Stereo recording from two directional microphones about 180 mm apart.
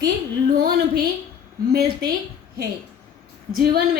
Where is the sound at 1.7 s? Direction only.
60° right (ahead or behind).